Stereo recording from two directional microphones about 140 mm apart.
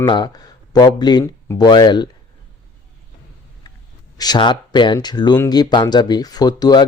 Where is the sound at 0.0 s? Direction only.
30° left (ahead or behind).